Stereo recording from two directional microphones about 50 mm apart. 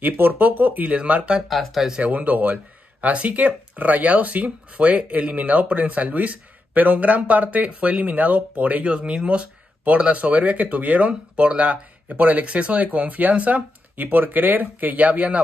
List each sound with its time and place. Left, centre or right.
0.0 s speech: right
1.5 s speech: centre
2.0 s speech: right